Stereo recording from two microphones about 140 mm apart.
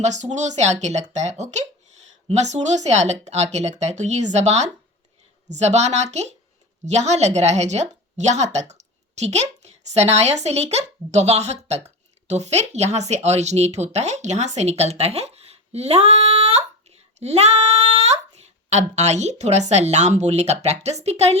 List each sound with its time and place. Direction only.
0.0 s a woman's voice: 55° right (ahead or behind)